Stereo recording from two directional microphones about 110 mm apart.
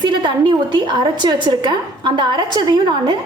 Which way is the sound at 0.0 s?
45° right (ahead or behind).